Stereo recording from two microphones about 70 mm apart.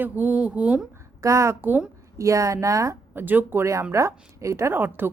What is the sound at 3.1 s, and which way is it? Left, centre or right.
Speech, right.